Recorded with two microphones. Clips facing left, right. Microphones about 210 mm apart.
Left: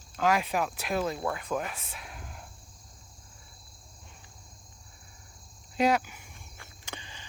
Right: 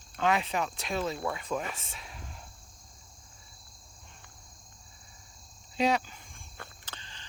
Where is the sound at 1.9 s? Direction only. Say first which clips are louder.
Left 2 dB; centre (ahead or behind).